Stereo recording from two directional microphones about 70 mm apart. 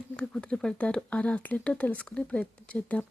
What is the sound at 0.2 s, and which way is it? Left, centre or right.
Speech, centre.